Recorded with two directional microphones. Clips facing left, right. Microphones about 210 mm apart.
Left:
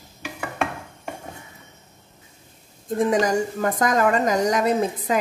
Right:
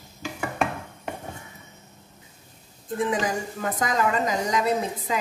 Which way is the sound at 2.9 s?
40° left (ahead or behind).